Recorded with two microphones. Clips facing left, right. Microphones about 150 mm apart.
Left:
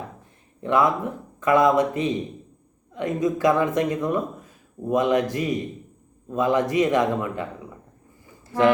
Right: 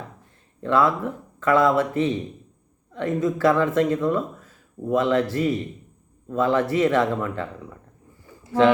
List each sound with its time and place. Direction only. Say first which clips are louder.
0.6 s speech: even; 15° left (ahead or behind)